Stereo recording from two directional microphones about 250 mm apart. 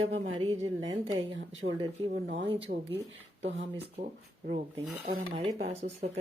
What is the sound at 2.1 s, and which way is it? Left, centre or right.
A woman's voice, right.